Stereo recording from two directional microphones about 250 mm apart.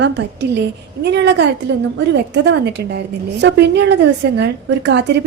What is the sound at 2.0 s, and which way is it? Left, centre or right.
A woman's voice, right.